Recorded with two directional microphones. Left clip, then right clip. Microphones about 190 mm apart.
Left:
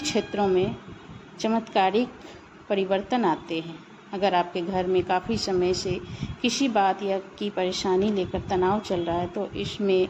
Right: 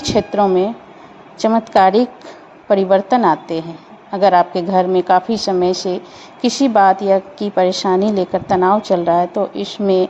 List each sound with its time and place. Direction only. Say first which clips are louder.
0.0 s a woman's voice: right 11 dB; 30° right (ahead or behind)